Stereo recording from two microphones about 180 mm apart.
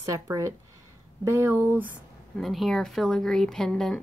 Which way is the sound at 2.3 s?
Centre (ahead or behind).